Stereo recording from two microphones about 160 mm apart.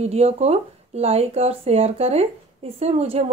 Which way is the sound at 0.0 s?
40° right (ahead or behind).